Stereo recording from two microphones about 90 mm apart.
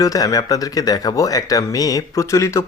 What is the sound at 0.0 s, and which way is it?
Speech, 40° left (ahead or behind).